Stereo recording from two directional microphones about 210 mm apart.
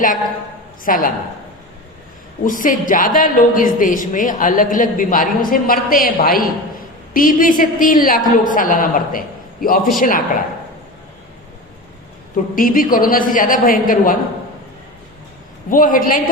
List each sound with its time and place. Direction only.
0.9 s a woman's voice: 40° left (ahead or behind)
2.4 s a woman's voice: 40° left (ahead or behind)
12.5 s a woman's voice: 40° left (ahead or behind)
15.7 s a woman's voice: 40° left (ahead or behind)